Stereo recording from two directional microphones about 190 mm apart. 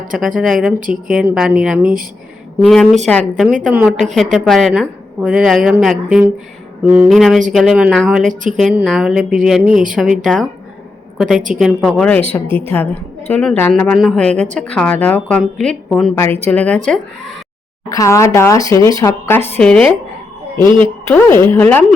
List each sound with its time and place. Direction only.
0.1 s a woman's voice: 5° right (ahead or behind)
0.8 s a woman's voice: 45° right (ahead or behind)
1.1 s a woman's voice: 5° right (ahead or behind)
12.5 s a woman's voice: 30° right (ahead or behind)
12.7 s a woman's voice: 10° left (ahead or behind)
17.8 s speech: 15° left (ahead or behind)
21.0 s speech: 10° left (ahead or behind)